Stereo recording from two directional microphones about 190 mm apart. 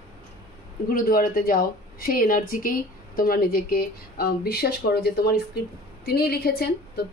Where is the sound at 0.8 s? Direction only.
50° left (ahead or behind).